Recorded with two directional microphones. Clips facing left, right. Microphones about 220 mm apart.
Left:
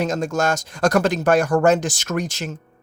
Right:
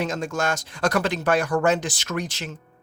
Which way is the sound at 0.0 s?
40° left (ahead or behind).